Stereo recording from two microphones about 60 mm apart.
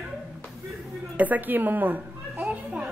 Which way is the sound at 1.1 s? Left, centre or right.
Right.